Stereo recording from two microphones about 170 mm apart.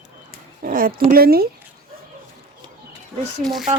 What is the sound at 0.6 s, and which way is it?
Speech, 55° right (ahead or behind).